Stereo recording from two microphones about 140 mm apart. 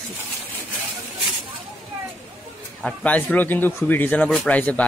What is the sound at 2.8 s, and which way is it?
Speech, 5° left (ahead or behind).